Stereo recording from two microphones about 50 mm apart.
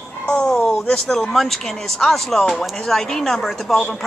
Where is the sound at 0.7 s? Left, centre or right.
Centre.